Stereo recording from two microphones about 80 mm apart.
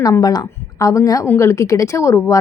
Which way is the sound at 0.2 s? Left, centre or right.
Left.